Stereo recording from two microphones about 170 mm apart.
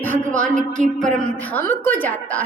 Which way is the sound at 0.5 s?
45° right (ahead or behind).